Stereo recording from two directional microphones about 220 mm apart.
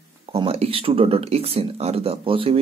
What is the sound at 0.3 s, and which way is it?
Speech, 25° right (ahead or behind).